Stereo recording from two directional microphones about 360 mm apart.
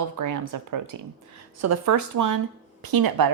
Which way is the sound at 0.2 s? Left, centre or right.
Right.